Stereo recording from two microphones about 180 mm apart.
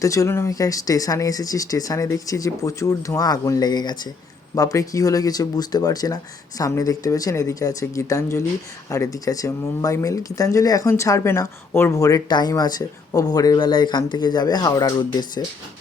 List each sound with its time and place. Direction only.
0.0 s speech: 15° left (ahead or behind)